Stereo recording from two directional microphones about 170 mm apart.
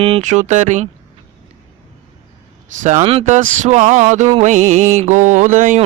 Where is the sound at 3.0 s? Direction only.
35° right (ahead or behind).